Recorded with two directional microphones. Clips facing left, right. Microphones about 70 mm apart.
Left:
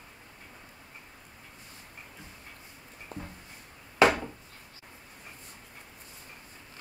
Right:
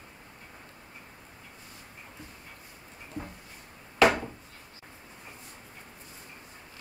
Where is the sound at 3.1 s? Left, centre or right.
Left.